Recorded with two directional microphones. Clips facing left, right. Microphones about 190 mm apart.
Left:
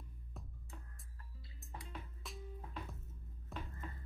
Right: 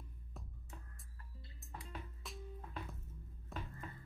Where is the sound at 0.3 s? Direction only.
Centre (ahead or behind).